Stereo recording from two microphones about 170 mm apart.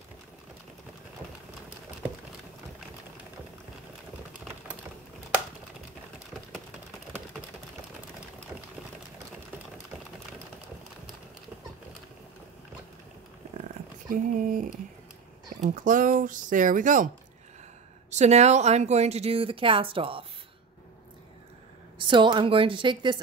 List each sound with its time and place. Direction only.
14.1 s speech: 50° right (ahead or behind)
18.1 s speech: 40° right (ahead or behind)
21.9 s a woman's voice: 30° right (ahead or behind)